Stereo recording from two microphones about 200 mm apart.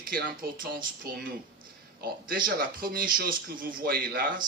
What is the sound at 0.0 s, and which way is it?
Speech, 45° right (ahead or behind).